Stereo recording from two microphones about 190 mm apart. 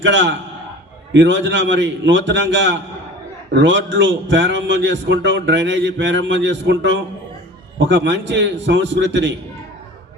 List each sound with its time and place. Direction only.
0.0 s a man's voice: 70° right (ahead or behind)